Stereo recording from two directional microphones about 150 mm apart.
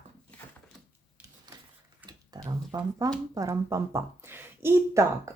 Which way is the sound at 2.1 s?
25° right (ahead or behind).